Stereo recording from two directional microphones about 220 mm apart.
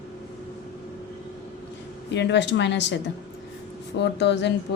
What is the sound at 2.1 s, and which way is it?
Speech, 55° left (ahead or behind).